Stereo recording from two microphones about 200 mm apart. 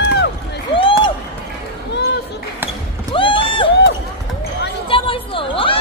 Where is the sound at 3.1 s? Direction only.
25° left (ahead or behind).